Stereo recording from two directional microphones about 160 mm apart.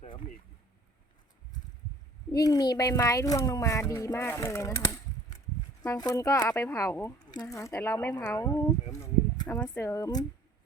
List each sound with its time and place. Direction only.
2.3 s speech: 25° left (ahead or behind)
9.0 s a sound: 20° left (ahead or behind)
9.7 s speech: 20° left (ahead or behind)